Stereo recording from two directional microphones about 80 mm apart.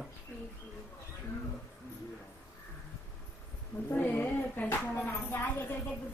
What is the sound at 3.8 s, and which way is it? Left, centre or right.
Speech, left.